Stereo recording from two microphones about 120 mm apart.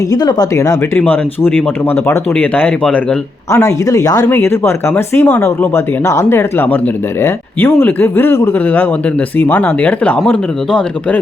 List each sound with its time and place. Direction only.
0.1 s speech: 35° left (ahead or behind)
1.1 s speech: 15° left (ahead or behind)
3.5 s speech: 25° left (ahead or behind)
4.3 s speech: 20° left (ahead or behind)